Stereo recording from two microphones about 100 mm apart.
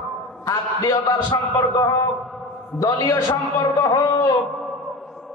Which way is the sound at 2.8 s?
35° left (ahead or behind).